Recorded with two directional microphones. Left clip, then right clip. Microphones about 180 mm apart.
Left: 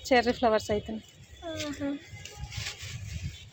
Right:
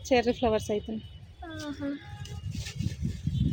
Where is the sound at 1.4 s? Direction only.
10° right (ahead or behind).